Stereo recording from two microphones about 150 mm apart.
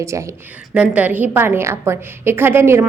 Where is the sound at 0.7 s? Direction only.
10° right (ahead or behind).